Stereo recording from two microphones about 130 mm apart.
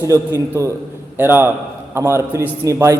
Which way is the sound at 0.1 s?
25° right (ahead or behind).